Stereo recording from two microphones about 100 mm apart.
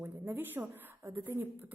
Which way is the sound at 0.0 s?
20° right (ahead or behind).